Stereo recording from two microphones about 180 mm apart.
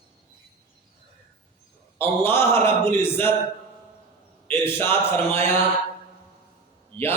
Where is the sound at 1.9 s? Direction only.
15° left (ahead or behind).